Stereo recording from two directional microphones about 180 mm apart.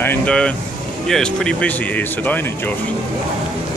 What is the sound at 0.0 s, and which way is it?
Speech, 10° left (ahead or behind).